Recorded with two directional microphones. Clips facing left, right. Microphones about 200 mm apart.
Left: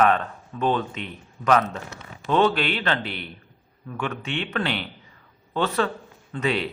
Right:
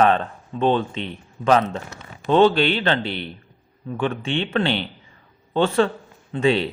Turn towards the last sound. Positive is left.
turn(degrees=-30)  # may be behind; listen again after turning